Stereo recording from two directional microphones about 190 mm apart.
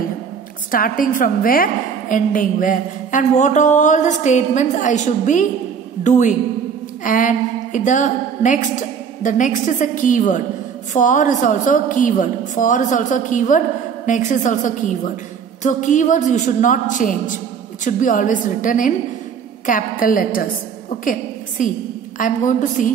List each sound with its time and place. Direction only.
0.7 s a woman's voice: 50° left (ahead or behind)